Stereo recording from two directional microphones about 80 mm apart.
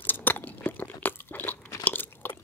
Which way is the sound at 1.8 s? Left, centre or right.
Left.